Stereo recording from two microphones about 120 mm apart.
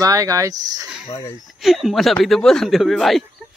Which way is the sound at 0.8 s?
5° right (ahead or behind).